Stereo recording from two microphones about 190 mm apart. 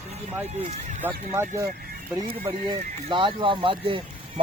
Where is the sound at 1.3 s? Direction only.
15° right (ahead or behind).